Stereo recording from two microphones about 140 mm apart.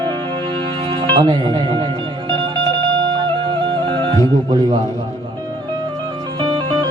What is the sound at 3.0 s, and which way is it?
Music, 30° right (ahead or behind).